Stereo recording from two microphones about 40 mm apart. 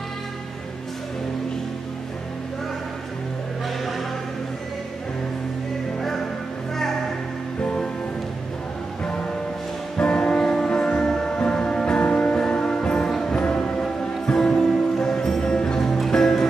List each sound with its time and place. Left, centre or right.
7.6 s music: left
9.9 s music: left; by 15.4 s centre
15.4 s music: centre